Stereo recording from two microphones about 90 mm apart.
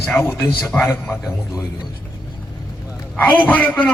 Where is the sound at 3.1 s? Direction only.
15° left (ahead or behind).